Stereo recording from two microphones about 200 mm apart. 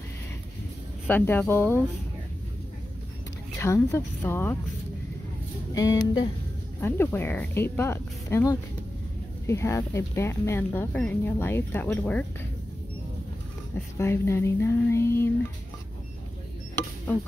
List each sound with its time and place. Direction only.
1.0 s speech: 10° left (ahead or behind)
3.5 s speech: 15° left (ahead or behind)
5.8 s speech: 20° left (ahead or behind)
6.8 s speech: 10° left (ahead or behind)
13.9 s speech: 15° left (ahead or behind)